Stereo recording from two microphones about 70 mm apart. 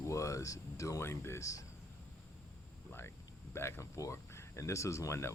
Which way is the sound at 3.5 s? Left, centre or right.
Left.